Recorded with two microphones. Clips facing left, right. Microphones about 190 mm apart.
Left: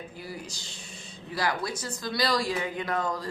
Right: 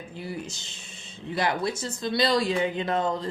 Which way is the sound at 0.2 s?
25° right (ahead or behind).